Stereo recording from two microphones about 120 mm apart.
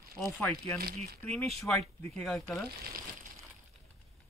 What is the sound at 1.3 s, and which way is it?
Speech, 5° left (ahead or behind).